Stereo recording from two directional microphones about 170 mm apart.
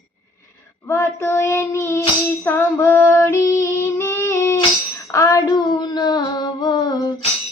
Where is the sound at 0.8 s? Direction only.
15° left (ahead or behind).